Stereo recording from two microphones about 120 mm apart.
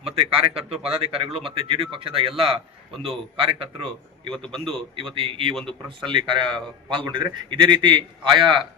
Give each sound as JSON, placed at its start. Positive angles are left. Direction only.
{"t": 0.0, "sound": "speech", "side_deg": -50}
{"t": 2.9, "sound": "a man's voice", "side_deg": 0}
{"t": 3.4, "sound": "speech", "side_deg": -55}
{"t": 4.4, "sound": "a man's voice", "side_deg": 5}
{"t": 4.9, "sound": "speech", "side_deg": -50}